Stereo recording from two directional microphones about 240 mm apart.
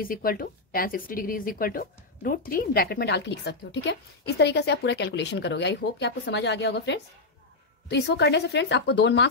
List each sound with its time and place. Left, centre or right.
0.0 s speech: left